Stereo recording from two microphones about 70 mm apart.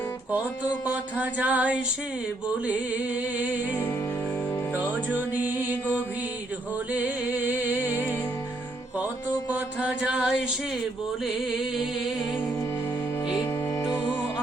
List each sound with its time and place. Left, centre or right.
1.2 s music: right
5.3 s music: right
9.8 s music: centre